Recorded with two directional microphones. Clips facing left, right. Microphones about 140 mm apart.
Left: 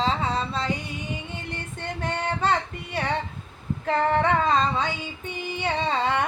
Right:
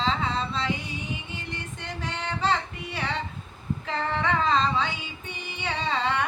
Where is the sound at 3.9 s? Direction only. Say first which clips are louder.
Left 6 dB; 50° left (ahead or behind).